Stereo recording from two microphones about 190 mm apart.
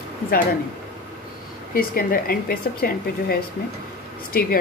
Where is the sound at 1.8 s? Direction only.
50° left (ahead or behind).